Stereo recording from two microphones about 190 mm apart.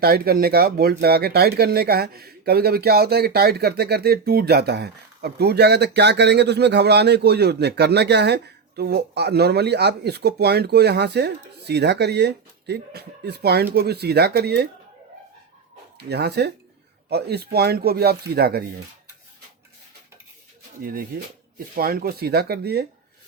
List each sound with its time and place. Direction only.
0.0 s speech: 55° right (ahead or behind)
16.0 s speech: 60° right (ahead or behind)
21.8 s speech: 50° right (ahead or behind)